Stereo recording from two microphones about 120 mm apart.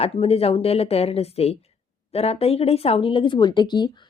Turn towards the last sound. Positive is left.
turn(degrees=40)  # may be behind; listen again after turning